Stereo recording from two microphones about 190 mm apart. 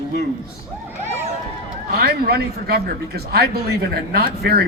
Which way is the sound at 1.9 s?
55° right (ahead or behind).